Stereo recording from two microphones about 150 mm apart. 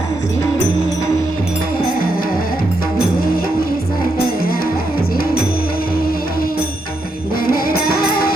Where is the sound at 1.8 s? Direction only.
75° left (ahead or behind).